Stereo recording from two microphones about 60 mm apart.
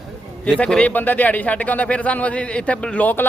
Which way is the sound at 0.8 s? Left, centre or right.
Left.